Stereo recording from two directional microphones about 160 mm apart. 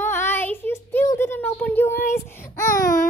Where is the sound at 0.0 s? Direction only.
15° left (ahead or behind).